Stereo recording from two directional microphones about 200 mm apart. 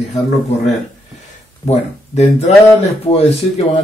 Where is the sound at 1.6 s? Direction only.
35° left (ahead or behind).